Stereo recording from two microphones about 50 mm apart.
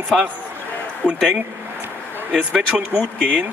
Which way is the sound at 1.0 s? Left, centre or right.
Centre.